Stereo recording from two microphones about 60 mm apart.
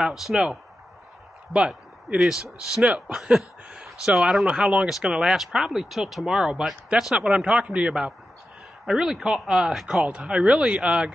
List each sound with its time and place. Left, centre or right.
0.0 s speech: centre
4.5 s speech: centre
10.0 s speech: centre